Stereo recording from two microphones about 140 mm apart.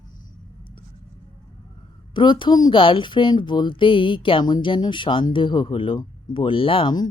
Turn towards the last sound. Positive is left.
turn(degrees=30)  # may be behind; listen again after turning